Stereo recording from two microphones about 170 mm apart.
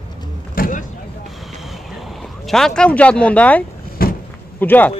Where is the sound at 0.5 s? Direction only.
55° left (ahead or behind).